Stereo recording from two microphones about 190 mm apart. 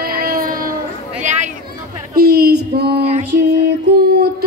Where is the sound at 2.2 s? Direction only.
55° right (ahead or behind).